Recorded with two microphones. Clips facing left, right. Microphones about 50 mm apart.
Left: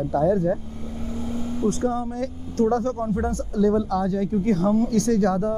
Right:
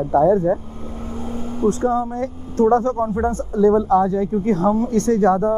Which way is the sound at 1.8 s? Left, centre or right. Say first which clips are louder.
Right 5 dB; right.